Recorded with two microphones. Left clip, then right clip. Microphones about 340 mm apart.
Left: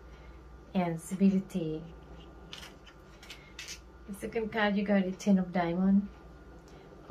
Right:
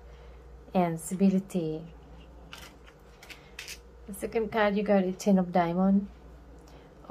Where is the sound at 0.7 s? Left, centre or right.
Centre.